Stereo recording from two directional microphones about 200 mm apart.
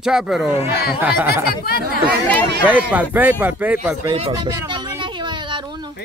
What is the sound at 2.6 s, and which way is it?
Speech, 10° right (ahead or behind).